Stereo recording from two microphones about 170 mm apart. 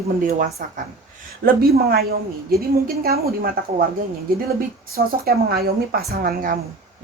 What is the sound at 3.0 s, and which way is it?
Speech, 65° right (ahead or behind).